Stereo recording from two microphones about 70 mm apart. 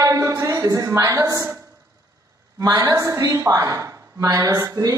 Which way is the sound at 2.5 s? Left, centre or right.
Right.